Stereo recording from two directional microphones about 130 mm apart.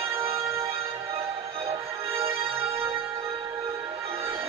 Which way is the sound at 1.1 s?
50° right (ahead or behind).